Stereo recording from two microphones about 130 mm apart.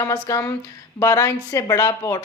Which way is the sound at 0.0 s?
25° left (ahead or behind).